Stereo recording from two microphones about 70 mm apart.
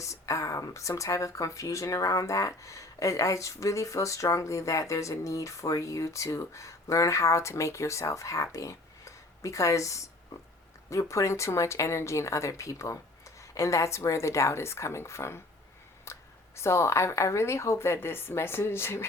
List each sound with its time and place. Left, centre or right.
0.0 s speech: left
11.1 s speech: left
16.1 s a sound: left
16.6 s a woman's voice: left